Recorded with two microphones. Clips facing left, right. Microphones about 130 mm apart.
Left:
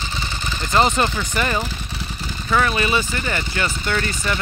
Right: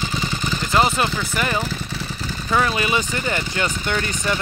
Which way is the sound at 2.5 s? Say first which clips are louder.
Left 1 dB; 15° right (ahead or behind).